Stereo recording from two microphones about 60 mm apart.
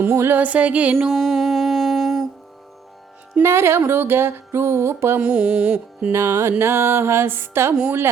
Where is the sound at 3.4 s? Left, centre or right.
Right.